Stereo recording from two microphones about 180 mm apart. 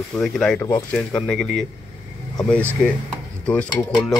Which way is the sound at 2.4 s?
5° left (ahead or behind).